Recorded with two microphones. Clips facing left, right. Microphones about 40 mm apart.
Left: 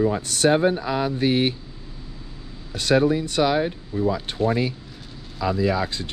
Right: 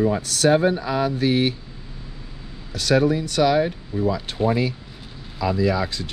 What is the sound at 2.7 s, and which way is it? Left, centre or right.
Speech, left.